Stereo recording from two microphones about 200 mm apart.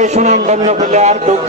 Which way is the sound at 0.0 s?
35° right (ahead or behind).